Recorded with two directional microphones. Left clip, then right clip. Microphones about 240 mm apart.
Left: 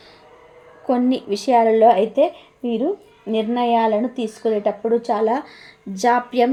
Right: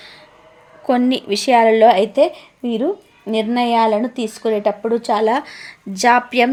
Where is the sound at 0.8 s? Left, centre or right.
Centre.